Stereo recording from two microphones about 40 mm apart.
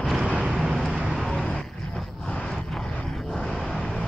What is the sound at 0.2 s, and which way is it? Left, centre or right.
Vehicle, right.